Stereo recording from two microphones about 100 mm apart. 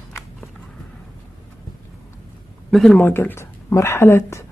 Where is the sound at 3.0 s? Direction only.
20° left (ahead or behind).